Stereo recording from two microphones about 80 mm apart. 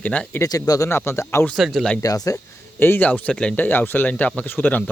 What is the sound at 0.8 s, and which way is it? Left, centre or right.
Speech, left.